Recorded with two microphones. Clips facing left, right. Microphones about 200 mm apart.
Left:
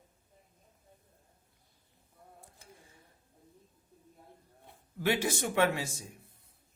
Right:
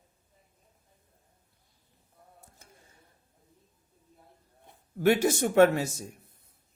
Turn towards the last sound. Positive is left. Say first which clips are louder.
# right 8 dB
turn(degrees=-45)  # may be behind; listen again after turning